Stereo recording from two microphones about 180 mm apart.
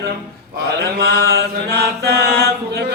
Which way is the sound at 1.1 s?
65° right (ahead or behind).